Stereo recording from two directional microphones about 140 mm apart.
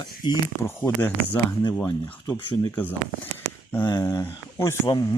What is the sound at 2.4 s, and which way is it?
Speech, 35° left (ahead or behind).